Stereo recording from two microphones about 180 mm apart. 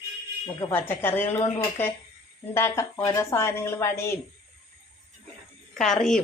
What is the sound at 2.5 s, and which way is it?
A woman's voice, 15° left (ahead or behind).